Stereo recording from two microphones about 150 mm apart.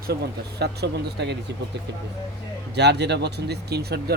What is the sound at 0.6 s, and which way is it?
Speech, 90° right.